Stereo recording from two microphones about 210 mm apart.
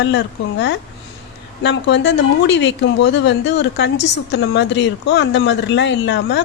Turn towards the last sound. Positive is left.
turn(degrees=55)  # may be behind; listen again after turning